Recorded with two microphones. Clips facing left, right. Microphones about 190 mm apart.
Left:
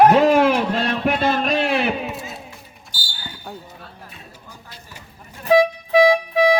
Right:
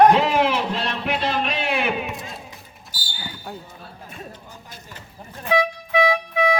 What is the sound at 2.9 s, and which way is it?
Basketball bounce, 25° left (ahead or behind).